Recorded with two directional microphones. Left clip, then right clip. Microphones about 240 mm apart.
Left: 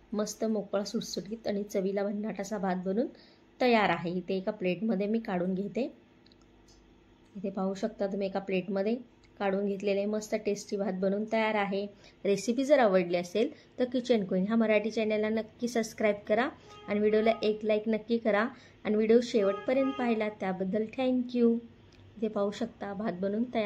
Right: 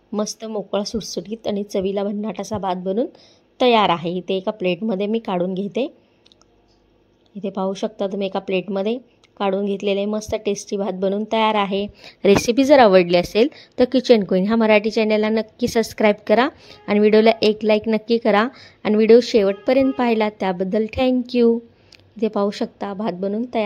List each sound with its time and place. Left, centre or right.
0.1 s a woman's voice: right
7.4 s a woman's voice: right